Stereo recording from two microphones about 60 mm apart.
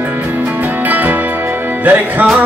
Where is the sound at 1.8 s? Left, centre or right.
Right.